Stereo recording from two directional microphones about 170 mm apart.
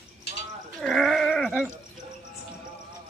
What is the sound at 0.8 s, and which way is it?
Gargling, centre (ahead or behind).